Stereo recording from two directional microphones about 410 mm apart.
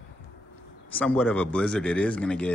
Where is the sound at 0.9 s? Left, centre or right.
Centre.